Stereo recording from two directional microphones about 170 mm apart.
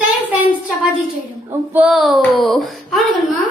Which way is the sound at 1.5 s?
10° right (ahead or behind).